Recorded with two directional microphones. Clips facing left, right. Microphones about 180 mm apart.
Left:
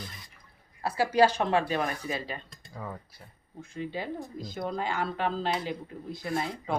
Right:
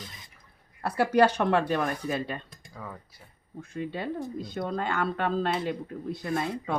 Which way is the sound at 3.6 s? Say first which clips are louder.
Right 2 dB; 60° right (ahead or behind).